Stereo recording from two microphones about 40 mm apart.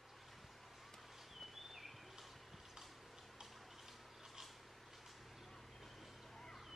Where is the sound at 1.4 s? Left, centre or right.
Centre.